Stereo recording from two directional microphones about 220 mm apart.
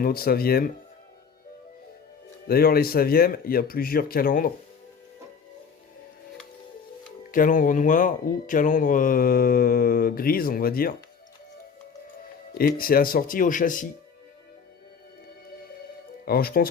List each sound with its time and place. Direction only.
0.0 s speech: 45° left (ahead or behind)
2.5 s speech: 45° left (ahead or behind)
7.3 s speech: 40° left (ahead or behind)
12.5 s speech: 40° left (ahead or behind)
16.2 s speech: 45° left (ahead or behind)